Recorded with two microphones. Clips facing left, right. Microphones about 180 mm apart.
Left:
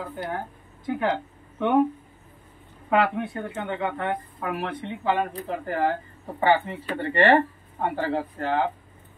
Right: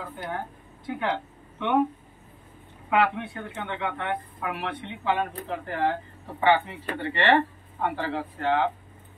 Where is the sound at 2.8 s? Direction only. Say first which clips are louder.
Left 1 dB; 40° left (ahead or behind).